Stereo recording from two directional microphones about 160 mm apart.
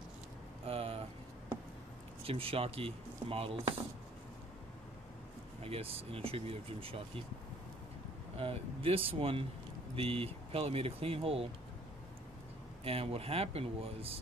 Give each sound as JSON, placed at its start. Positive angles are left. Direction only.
{"t": 0.7, "sound": "vehicle", "side_deg": -35}
{"t": 2.2, "sound": "speech", "side_deg": -35}
{"t": 5.6, "sound": "speech", "side_deg": -35}
{"t": 8.4, "sound": "speech", "side_deg": -35}
{"t": 12.8, "sound": "speech", "side_deg": -35}